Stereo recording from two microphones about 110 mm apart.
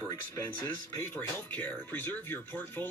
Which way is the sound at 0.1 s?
35° left (ahead or behind).